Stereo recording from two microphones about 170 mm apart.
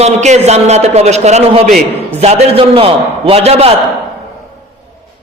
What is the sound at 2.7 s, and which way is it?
Speech, 35° right (ahead or behind).